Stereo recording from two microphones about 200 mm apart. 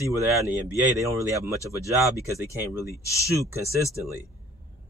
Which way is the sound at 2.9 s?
15° left (ahead or behind).